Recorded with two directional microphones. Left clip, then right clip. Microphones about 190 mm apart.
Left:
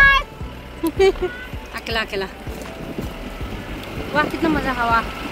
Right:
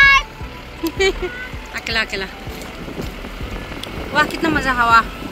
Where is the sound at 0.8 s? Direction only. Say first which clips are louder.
Left 2 dB; 40° left (ahead or behind).